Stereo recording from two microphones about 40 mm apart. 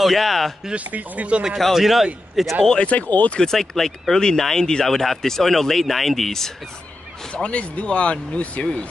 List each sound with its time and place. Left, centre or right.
0.0 s speech: centre
0.7 s speech: right
1.7 s speech: centre
2.9 s speech: left
3.3 s speech: centre
4.8 s speech: centre
7.3 s speech: left